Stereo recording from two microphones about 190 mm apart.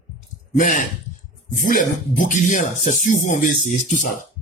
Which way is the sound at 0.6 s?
45° left (ahead or behind).